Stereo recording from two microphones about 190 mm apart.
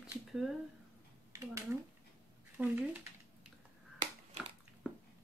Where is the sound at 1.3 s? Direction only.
15° right (ahead or behind).